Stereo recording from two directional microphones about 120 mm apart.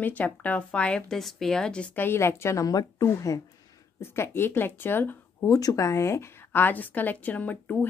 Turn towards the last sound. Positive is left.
turn(degrees=10)  # may be behind; listen again after turning